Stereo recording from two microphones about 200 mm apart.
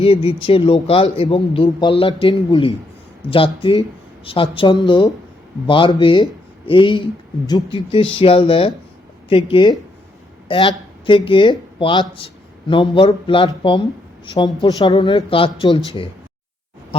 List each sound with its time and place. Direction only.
0.0 s speech: 25° left (ahead or behind)